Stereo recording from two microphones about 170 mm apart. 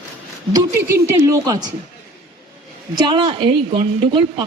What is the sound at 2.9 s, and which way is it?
Speech, 25° right (ahead or behind).